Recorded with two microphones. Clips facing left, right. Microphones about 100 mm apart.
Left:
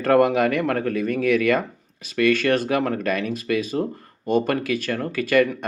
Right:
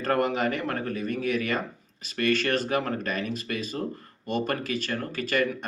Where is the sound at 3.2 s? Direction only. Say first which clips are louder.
Left 4 dB; 35° right (ahead or behind).